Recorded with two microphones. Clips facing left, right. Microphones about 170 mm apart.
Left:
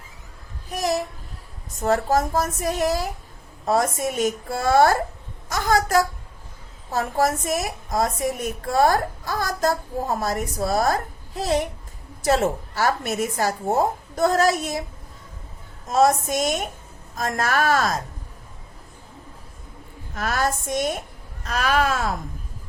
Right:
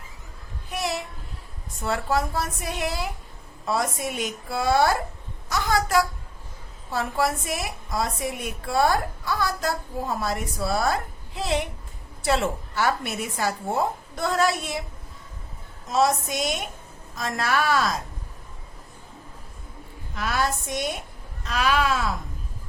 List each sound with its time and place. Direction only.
0.7 s a sound: 40° left (ahead or behind)
1.8 s a woman's voice: 40° left (ahead or behind)
15.9 s a woman's voice: 50° left (ahead or behind)
20.1 s a woman's voice: 45° left (ahead or behind)